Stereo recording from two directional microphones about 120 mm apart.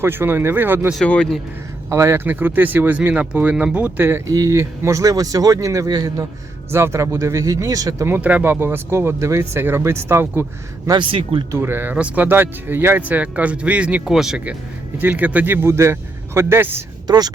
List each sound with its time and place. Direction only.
0.0 s speech: 20° right (ahead or behind)
0.9 s speech: 10° left (ahead or behind)
1.9 s speech: 25° right (ahead or behind)
10.8 s speech: 40° right (ahead or behind)
11.5 s speech: 20° right (ahead or behind)
17.1 s speech: 35° right (ahead or behind)